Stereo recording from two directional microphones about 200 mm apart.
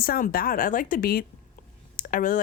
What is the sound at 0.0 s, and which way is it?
Speech, 45° left (ahead or behind).